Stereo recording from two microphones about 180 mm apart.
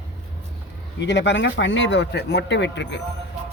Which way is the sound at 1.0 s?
80° left.